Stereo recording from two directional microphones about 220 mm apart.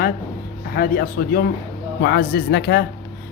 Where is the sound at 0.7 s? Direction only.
45° left (ahead or behind).